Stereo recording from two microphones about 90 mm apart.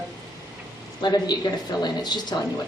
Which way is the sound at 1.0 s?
50° left (ahead or behind).